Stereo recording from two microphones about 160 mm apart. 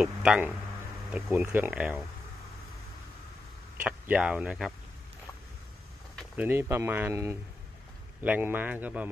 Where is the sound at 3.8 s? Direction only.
10° right (ahead or behind).